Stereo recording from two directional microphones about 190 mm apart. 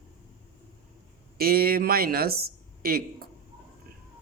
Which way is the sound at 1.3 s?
50° right (ahead or behind).